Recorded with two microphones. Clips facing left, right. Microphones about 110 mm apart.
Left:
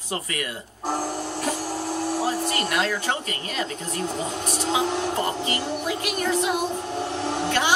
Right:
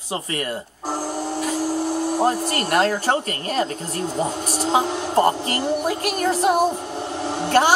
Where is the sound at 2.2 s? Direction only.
50° right (ahead or behind).